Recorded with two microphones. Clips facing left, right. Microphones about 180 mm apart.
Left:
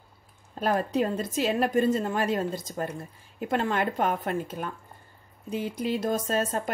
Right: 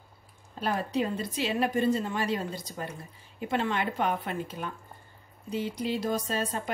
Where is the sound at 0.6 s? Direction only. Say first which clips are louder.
Left 4 dB; 45° left (ahead or behind).